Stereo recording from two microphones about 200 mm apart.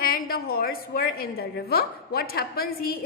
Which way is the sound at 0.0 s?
50° left (ahead or behind).